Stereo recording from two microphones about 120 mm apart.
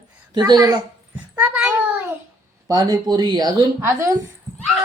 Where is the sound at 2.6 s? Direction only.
35° right (ahead or behind).